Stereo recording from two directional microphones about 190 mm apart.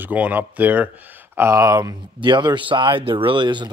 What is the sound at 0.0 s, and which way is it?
Speech, 10° right (ahead or behind).